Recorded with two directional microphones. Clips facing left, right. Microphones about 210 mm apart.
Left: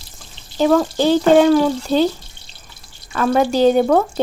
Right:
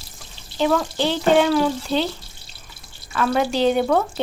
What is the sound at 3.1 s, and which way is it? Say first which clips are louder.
Speech: left 4 dB; 45° left (ahead or behind).